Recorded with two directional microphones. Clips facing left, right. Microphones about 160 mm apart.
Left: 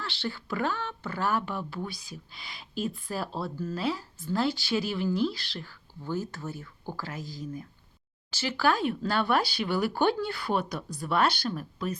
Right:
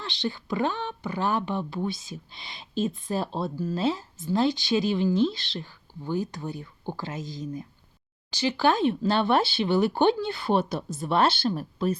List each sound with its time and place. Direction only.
0.0 s speech: 20° right (ahead or behind)